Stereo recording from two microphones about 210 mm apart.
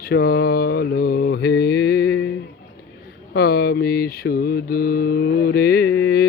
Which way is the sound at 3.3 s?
50° left (ahead or behind).